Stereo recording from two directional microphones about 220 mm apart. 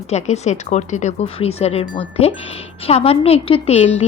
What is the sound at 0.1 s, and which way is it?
Speech, 30° left (ahead or behind).